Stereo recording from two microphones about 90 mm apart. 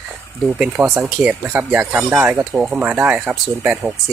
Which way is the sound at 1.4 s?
20° right (ahead or behind).